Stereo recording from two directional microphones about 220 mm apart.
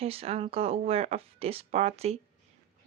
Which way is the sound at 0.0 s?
25° right (ahead or behind).